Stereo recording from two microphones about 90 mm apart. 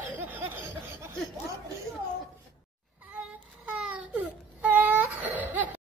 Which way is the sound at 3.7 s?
15° right (ahead or behind).